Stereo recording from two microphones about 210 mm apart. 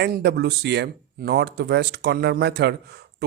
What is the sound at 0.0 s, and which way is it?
Speech, 55° right (ahead or behind).